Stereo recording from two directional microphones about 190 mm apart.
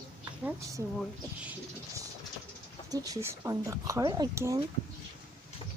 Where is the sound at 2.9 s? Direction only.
20° right (ahead or behind).